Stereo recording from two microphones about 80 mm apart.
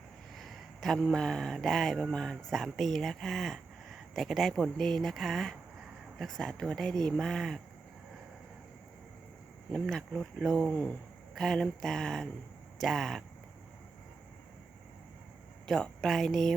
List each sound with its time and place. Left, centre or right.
0.3 s speech: centre
9.8 s speech: centre
10.7 s speech: centre
11.3 s speech: centre
15.6 s speech: centre